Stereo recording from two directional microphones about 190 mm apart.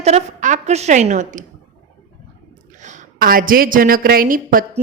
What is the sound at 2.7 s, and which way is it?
Speech, 40° right (ahead or behind).